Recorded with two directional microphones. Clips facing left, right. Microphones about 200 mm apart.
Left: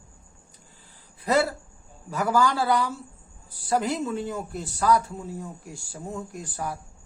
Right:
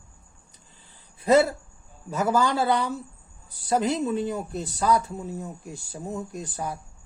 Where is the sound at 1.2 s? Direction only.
25° right (ahead or behind).